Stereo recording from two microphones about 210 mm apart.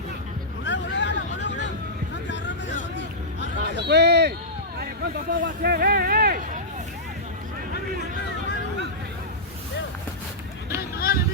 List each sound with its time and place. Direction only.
0.6 s vehicle: 60° left (ahead or behind)
3.8 s a sound: 50° right (ahead or behind)
4.8 s hubbub: 55° right (ahead or behind)
10.8 s vehicle: 45° left (ahead or behind)